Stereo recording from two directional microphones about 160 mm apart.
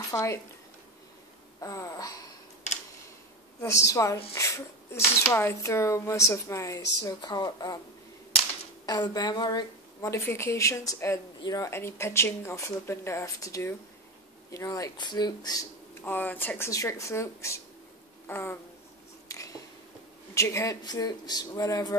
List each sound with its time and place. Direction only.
0.1 s speech: 20° left (ahead or behind)
1.6 s a woman's voice: 20° left (ahead or behind)
3.6 s a woman's voice: 20° left (ahead or behind)
8.8 s a woman's voice: 25° left (ahead or behind)
16.0 s speech: 10° left (ahead or behind)
18.2 s a sound: 15° left (ahead or behind)
20.3 s a woman's voice: 20° left (ahead or behind)